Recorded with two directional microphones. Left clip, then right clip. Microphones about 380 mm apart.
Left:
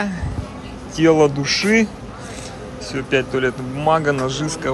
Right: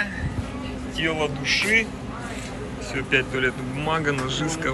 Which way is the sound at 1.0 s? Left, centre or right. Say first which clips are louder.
Left 11 dB; left.